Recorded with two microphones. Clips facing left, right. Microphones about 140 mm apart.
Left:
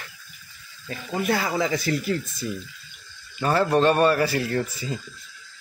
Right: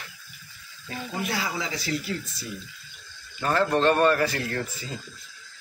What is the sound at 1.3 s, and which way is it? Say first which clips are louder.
Speech: left 10 dB; 55° left (ahead or behind).